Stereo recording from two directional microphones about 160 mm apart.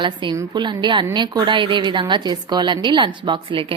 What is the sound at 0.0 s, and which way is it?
A woman's voice, 30° right (ahead or behind).